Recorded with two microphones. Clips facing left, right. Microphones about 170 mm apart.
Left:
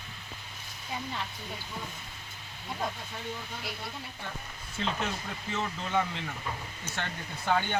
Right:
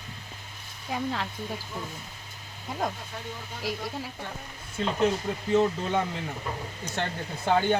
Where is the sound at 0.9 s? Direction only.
80° right.